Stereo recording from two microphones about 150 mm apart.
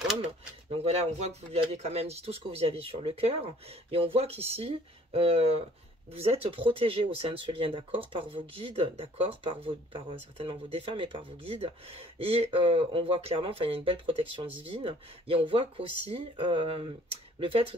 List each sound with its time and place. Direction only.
0.2 s speech: 40° right (ahead or behind)